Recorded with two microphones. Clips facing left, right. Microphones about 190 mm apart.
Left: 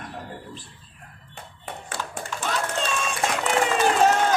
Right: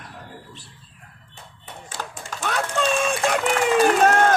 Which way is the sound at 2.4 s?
60° right (ahead or behind).